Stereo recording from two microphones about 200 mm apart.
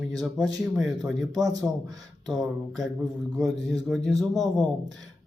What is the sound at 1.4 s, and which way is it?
Speech, 15° right (ahead or behind).